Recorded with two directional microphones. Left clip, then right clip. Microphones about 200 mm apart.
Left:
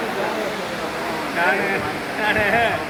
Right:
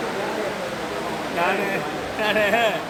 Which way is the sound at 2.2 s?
75° right (ahead or behind).